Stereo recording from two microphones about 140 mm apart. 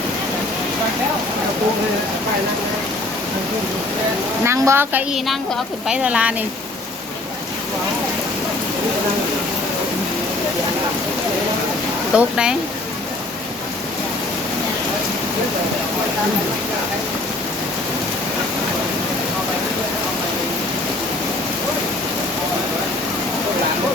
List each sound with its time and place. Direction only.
4.4 s a woman's voice: 20° right (ahead or behind)
12.1 s speech: 5° right (ahead or behind)